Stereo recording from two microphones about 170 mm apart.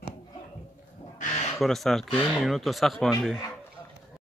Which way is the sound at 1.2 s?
45° left (ahead or behind).